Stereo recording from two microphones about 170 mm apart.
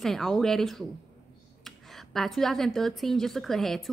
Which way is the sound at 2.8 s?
Centre (ahead or behind).